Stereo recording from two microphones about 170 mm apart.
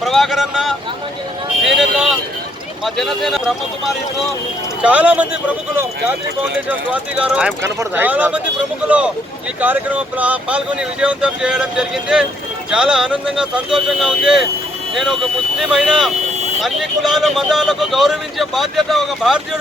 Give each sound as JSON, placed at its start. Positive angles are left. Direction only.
{"t": 0.0, "sound": "speech", "side_deg": 0}
{"t": 4.8, "sound": "speech", "side_deg": -10}
{"t": 15.7, "sound": "speech", "side_deg": -5}